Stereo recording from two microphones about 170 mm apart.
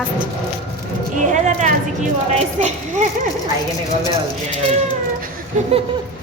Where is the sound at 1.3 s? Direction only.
45° right (ahead or behind).